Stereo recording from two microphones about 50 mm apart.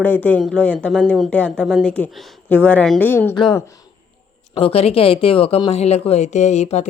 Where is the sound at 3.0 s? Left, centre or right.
Left.